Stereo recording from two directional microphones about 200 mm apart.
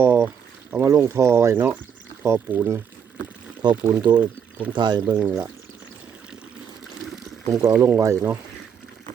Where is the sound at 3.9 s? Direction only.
10° right (ahead or behind).